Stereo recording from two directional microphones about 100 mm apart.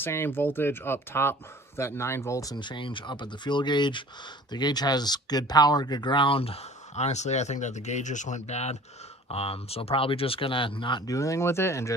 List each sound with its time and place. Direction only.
0.0 s speech: 20° left (ahead or behind)
2.5 s speech: 50° left (ahead or behind); by 7.3 s 90° left
8.5 s speech: 90° left
9.3 s speech: 80° left; by 11.1 s 55° left (ahead or behind)
11.1 s speech: 30° left (ahead or behind)